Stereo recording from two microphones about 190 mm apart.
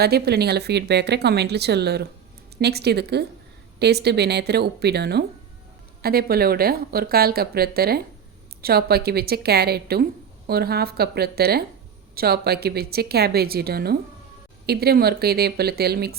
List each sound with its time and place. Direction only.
0.0 s a woman's voice: 55° right (ahead or behind)